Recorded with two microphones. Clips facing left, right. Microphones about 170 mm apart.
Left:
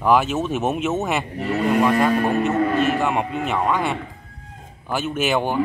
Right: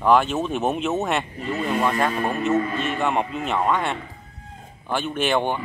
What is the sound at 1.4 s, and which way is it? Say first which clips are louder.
Speech: left 5 dB; 65° left (ahead or behind).